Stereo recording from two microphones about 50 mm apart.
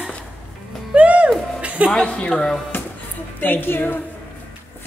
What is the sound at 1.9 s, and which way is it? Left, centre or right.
Speech, centre.